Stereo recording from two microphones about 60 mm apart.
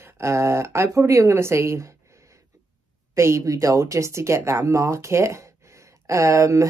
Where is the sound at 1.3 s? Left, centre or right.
Right.